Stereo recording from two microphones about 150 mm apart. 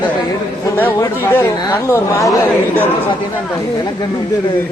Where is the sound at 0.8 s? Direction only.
15° left (ahead or behind).